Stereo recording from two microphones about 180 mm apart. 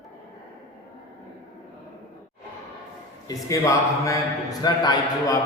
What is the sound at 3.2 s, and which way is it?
A man's voice, 15° left (ahead or behind).